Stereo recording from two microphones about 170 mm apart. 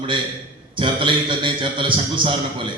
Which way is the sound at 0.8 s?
30° right (ahead or behind).